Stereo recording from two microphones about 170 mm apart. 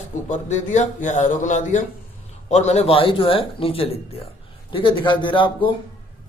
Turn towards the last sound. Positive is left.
turn(degrees=30)  # may be behind; listen again after turning